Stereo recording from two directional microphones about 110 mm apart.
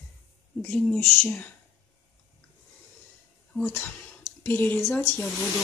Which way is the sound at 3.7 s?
15° left (ahead or behind).